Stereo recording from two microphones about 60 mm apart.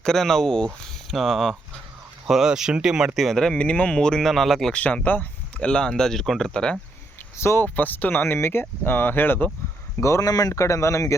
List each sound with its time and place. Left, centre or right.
0.0 s speech: centre
1.1 s speech: centre
3.2 s speech: centre
3.6 s speech: centre
4.3 s speech: centre
4.7 s speech: left
5.5 s speech: centre
7.3 s speech: left
10.0 s a man's voice: left
10.2 s a man's voice: left